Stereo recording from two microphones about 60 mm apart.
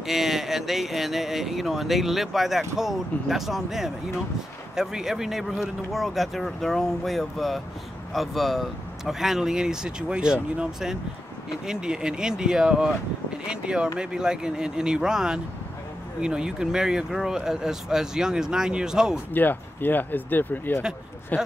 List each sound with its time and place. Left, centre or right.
0.0 s speech: centre
19.3 s speech: left